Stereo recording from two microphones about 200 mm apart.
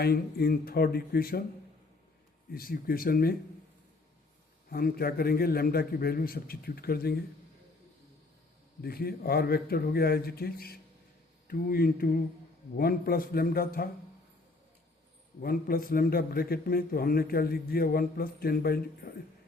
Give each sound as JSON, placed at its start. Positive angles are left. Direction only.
{"t": 0.0, "sound": "a man's voice", "side_deg": 50}
{"t": 2.5, "sound": "a man's voice", "side_deg": 50}
{"t": 4.7, "sound": "a man's voice", "side_deg": 50}
{"t": 8.8, "sound": "a man's voice", "side_deg": 50}
{"t": 15.4, "sound": "a man's voice", "side_deg": 45}